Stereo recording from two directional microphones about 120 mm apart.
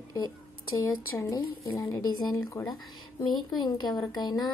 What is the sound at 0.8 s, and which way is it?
Speech, 25° left (ahead or behind).